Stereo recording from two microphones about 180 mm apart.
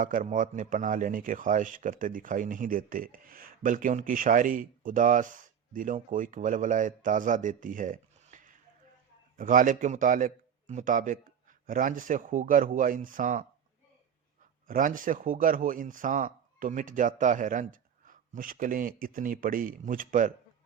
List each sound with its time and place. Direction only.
0.0 s speech: 50° right (ahead or behind)
14.7 s speech: 50° right (ahead or behind)